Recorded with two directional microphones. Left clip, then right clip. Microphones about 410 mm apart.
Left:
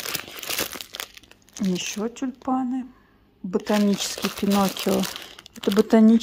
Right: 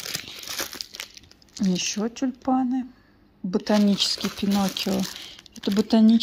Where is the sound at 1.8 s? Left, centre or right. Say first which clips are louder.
Right 1 dB; centre.